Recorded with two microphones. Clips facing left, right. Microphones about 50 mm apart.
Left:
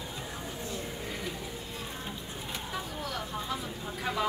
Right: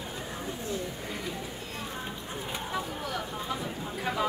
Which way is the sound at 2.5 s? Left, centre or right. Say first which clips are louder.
Right 4 dB; centre.